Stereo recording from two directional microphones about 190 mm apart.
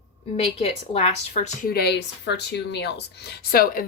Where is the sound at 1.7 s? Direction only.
60° left (ahead or behind).